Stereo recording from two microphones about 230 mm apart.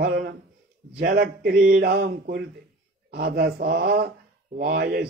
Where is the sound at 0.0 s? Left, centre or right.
Right.